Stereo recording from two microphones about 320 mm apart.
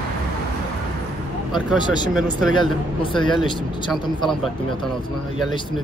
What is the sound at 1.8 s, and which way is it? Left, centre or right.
Speech, centre.